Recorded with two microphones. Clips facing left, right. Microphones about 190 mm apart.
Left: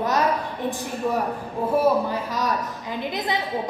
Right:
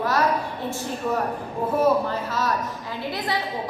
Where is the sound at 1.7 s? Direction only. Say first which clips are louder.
Even; 15° left (ahead or behind).